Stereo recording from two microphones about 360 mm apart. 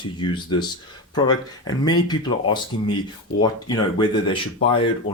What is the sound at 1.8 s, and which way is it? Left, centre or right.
Speech, centre.